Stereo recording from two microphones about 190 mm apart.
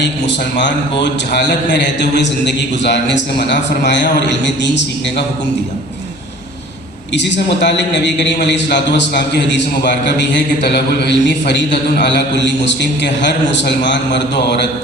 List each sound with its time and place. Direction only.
0.0 s a man's voice: 70° left (ahead or behind)
7.1 s a man's voice: 70° left (ahead or behind)